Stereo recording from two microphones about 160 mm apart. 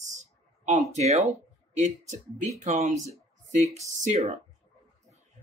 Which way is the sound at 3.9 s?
45° right (ahead or behind).